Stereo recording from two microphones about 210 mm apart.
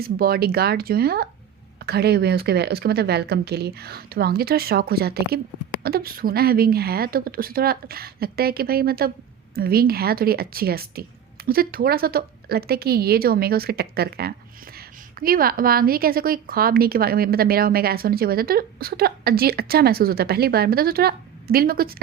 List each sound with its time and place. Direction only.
0.0 s a woman's voice: 45° right (ahead or behind)